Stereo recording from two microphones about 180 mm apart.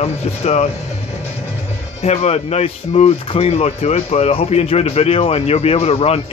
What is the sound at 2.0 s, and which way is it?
Speech, 35° left (ahead or behind).